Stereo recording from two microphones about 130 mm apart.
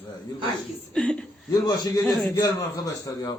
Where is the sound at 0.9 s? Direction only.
5° left (ahead or behind).